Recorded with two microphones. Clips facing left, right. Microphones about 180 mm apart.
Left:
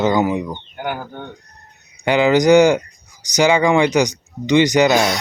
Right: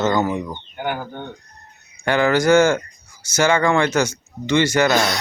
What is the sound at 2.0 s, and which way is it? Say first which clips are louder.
Speech: left 3 dB; 15° left (ahead or behind).